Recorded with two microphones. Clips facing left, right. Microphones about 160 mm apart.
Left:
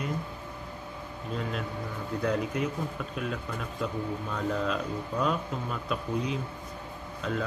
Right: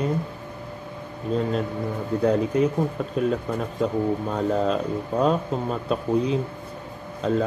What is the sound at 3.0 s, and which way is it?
A man's voice, 35° right (ahead or behind).